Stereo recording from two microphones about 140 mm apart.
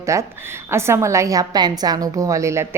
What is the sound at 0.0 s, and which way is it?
A woman's voice, 20° right (ahead or behind).